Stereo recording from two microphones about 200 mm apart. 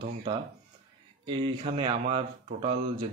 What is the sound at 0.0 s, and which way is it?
A man's voice, 25° right (ahead or behind).